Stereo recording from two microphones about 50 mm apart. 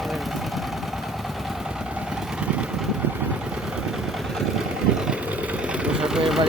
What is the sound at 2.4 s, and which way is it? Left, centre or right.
Vehicle, right.